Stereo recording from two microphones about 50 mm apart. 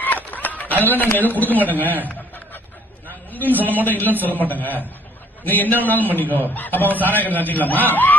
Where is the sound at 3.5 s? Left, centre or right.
Left.